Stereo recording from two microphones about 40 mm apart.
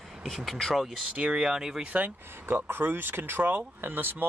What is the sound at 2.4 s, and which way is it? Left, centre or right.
Speech, right.